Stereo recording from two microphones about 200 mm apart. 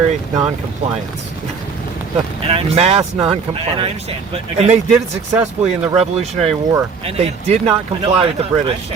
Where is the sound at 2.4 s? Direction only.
30° right (ahead or behind).